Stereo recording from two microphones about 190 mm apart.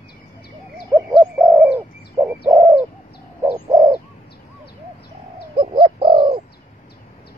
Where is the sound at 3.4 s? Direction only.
10° right (ahead or behind).